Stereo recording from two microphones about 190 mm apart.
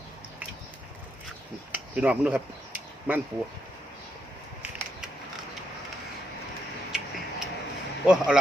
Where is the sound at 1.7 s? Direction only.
5° right (ahead or behind).